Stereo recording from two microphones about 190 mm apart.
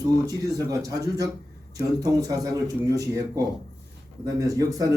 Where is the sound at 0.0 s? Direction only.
20° right (ahead or behind).